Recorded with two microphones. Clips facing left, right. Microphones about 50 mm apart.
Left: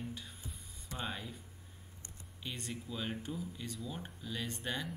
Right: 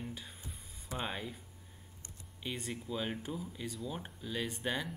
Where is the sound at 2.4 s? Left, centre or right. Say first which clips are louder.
Right 3 dB; centre.